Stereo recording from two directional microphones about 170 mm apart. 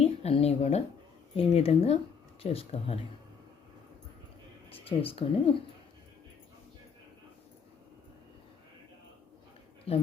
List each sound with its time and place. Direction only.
0.0 s speech: 35° left (ahead or behind)
4.7 s speech: 35° left (ahead or behind)
9.9 s speech: 35° left (ahead or behind)